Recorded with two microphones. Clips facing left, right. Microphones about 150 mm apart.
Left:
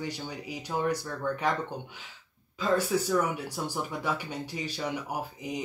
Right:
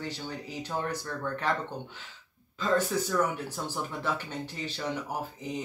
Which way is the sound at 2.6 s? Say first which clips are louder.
Left 1 dB; 10° left (ahead or behind).